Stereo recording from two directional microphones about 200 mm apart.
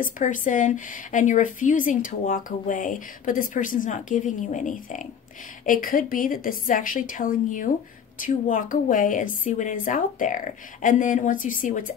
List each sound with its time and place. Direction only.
0.0 s a woman's voice: 40° left (ahead or behind)